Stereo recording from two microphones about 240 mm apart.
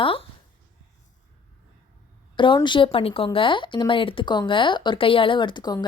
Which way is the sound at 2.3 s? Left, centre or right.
Centre.